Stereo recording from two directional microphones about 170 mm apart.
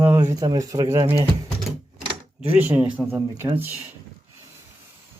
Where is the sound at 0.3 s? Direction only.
20° right (ahead or behind).